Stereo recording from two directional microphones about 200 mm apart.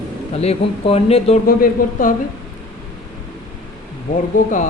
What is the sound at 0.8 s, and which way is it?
Speech, 30° left (ahead or behind).